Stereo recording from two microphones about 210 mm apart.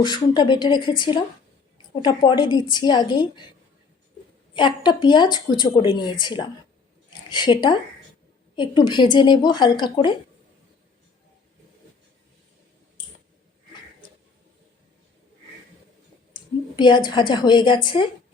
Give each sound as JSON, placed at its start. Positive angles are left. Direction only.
{"t": 0.0, "sound": "speech", "side_deg": 20}
{"t": 4.5, "sound": "speech", "side_deg": 20}
{"t": 16.3, "sound": "a woman's voice", "side_deg": 20}